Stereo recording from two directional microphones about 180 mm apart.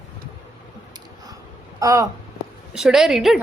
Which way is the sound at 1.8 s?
15° right (ahead or behind).